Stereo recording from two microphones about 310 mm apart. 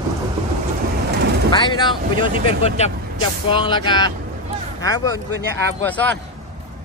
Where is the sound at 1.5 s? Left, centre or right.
Centre.